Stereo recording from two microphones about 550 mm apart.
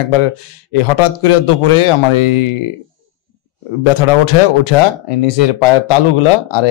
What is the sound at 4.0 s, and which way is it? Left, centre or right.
Speech, left.